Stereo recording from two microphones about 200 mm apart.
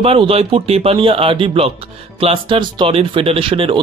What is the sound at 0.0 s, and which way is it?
Speech, 30° right (ahead or behind).